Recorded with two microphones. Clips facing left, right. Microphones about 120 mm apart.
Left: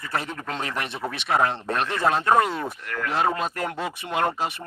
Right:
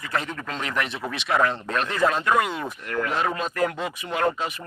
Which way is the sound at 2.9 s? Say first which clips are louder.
Right 7 dB; 25° right (ahead or behind).